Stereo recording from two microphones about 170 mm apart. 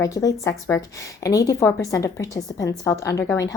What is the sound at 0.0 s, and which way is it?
A woman's voice, 20° left (ahead or behind).